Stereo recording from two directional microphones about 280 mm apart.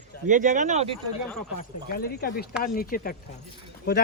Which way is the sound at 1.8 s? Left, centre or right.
Left.